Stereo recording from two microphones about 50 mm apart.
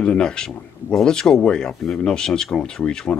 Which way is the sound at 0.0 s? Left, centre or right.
Centre.